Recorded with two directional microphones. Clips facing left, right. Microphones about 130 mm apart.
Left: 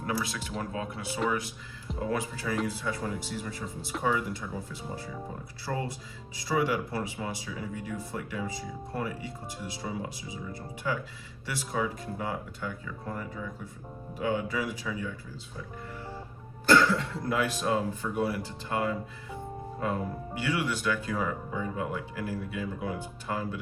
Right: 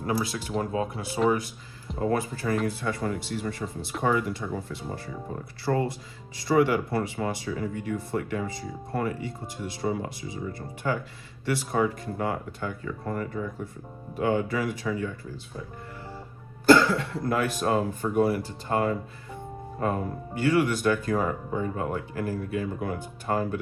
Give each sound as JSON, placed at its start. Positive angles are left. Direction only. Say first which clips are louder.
{"t": 0.1, "sound": "speech", "louder": "right 5 dB", "side_deg": -30}
{"t": 2.0, "sound": "speech", "louder": "right 5 dB", "side_deg": -50}
{"t": 17.2, "sound": "speech", "louder": "right 3 dB", "side_deg": -50}